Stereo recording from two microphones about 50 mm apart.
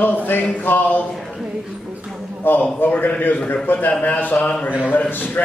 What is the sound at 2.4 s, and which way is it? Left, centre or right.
A man's voice, left.